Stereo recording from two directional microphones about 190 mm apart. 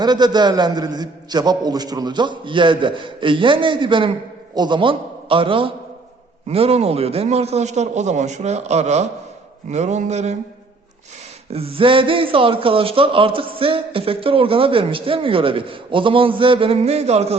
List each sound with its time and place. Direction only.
0.0 s a man's voice: 20° right (ahead or behind)
11.5 s a man's voice: 30° right (ahead or behind)